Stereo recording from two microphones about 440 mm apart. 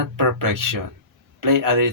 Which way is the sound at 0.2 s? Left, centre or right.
Right.